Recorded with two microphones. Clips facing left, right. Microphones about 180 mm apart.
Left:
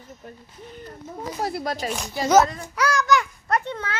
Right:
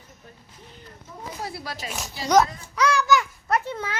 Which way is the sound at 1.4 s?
45° left (ahead or behind).